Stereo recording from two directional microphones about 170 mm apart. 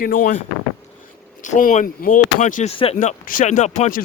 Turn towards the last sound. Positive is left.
turn(degrees=45)  # may be behind; listen again after turning